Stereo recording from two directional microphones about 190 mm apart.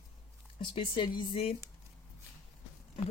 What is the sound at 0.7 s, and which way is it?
Speech, 25° left (ahead or behind).